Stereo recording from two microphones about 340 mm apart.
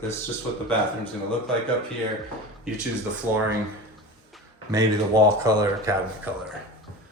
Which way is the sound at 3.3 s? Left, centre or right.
Centre.